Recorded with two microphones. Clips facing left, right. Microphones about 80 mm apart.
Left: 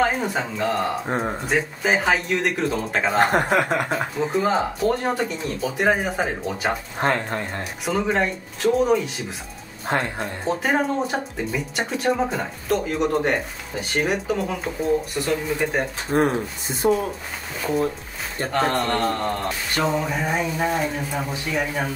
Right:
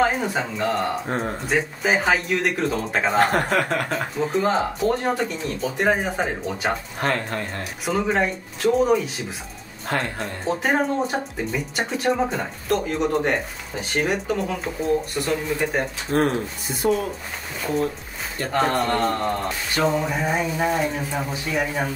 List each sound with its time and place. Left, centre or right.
0.0 s speech: centre
1.0 s speech: centre
1.5 s speech: centre
3.2 s speech: centre
7.0 s speech: centre
7.8 s speech: centre
9.8 s speech: centre
10.2 s speech: centre
16.1 s speech: centre
18.5 s speech: centre